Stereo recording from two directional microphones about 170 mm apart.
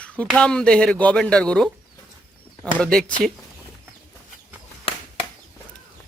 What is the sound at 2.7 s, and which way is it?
Speech, 5° left (ahead or behind).